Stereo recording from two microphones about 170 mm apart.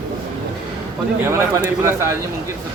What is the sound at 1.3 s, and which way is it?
Speech, 15° right (ahead or behind).